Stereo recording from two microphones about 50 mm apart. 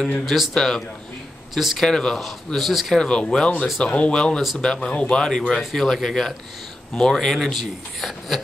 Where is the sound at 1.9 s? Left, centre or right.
Centre.